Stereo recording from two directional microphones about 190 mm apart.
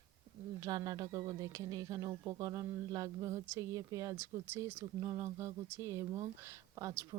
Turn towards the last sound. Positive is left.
turn(degrees=-15)  # may be behind; listen again after turning